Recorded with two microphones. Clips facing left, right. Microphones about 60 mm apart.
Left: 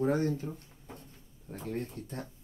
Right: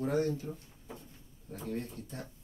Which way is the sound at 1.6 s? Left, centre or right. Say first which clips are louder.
Left 1 dB; left.